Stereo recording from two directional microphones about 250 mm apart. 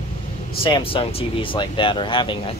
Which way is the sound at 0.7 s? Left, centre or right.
Centre.